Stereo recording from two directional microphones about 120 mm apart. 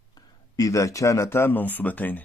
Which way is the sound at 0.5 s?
30° left (ahead or behind).